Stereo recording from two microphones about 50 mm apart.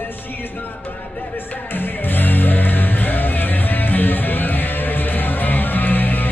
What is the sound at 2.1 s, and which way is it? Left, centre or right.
Music, left.